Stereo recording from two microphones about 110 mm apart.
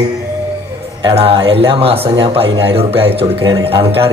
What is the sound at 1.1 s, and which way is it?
A man's voice, 60° right (ahead or behind).